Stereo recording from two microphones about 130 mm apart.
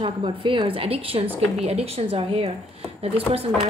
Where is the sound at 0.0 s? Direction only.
40° right (ahead or behind).